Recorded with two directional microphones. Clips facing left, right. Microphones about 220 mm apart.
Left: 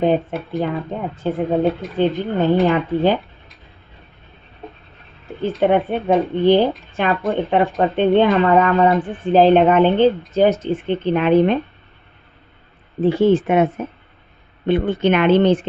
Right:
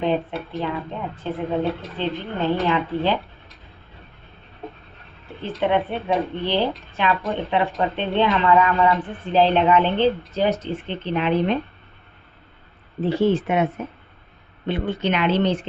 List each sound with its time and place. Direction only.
0.0 s speech: 45° left (ahead or behind)
5.5 s speech: 45° left (ahead or behind)
13.2 s speech: 50° left (ahead or behind)